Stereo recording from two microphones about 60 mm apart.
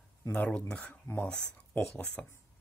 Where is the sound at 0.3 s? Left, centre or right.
Centre.